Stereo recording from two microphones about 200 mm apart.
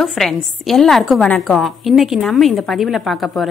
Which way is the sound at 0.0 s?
Centre (ahead or behind).